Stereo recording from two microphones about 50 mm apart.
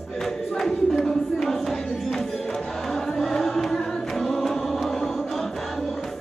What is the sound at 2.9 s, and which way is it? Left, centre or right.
Chant, centre.